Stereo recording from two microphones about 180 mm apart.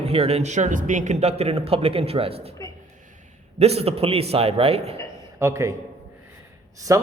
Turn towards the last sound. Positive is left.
turn(degrees=-15)  # may be behind; listen again after turning